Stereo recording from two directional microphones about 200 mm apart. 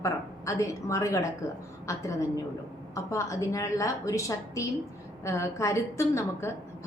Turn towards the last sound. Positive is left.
turn(degrees=15)  # may be behind; listen again after turning